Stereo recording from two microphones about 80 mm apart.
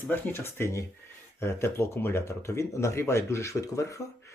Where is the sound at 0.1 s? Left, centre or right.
Left.